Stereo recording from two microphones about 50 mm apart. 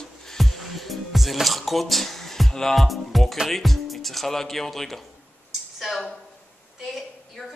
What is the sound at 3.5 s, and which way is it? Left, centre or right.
Speech, centre.